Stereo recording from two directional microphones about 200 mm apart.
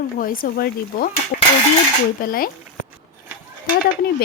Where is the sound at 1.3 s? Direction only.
45° left (ahead or behind).